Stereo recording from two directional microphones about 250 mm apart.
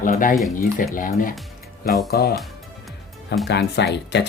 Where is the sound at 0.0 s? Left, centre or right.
Left.